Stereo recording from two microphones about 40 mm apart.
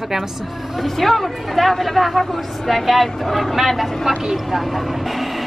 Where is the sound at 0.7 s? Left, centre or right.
Centre.